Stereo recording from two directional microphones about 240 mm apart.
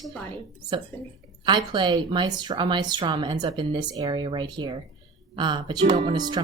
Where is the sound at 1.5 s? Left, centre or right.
Centre.